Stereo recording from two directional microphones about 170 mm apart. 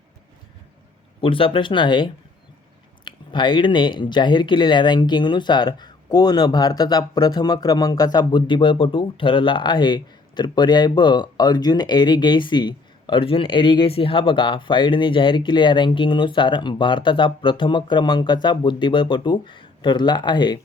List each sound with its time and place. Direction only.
1.2 s speech: 30° left (ahead or behind)